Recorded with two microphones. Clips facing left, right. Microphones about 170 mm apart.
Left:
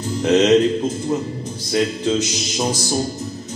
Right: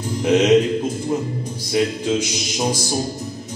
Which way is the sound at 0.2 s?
10° right (ahead or behind).